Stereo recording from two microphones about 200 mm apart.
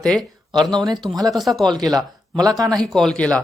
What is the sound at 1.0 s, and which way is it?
Speech, 20° right (ahead or behind).